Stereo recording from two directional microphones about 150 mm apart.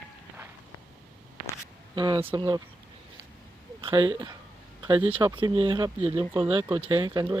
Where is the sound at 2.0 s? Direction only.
35° right (ahead or behind).